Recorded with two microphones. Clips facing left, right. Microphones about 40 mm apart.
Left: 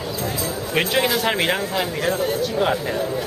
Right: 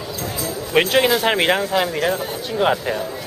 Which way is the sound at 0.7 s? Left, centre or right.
Centre.